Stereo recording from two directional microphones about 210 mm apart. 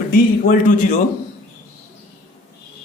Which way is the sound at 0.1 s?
40° left (ahead or behind).